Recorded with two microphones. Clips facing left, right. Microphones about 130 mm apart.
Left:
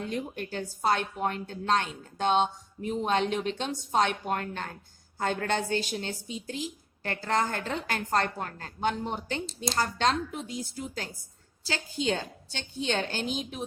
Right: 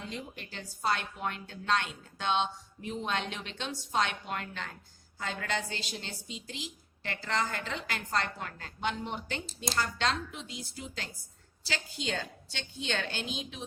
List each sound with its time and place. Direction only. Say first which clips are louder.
0.1 s a woman's voice: left 8 dB; 45° left (ahead or behind)